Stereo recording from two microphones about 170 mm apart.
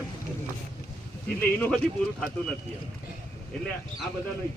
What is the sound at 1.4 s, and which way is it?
Speech, 10° left (ahead or behind).